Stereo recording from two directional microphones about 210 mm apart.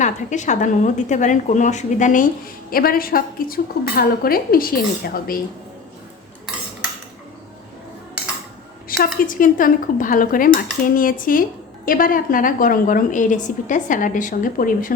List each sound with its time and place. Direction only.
0.0 s a woman's voice: 35° left (ahead or behind)
8.9 s a sound: 45° left (ahead or behind)
9.2 s a woman's voice: 40° left (ahead or behind)